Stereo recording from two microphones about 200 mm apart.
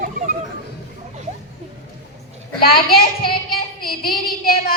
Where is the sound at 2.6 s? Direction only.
50° left (ahead or behind).